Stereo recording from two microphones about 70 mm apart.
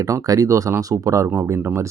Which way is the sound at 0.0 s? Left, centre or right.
Right.